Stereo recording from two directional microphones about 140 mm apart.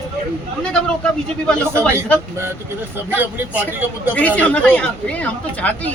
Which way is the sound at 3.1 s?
10° right (ahead or behind).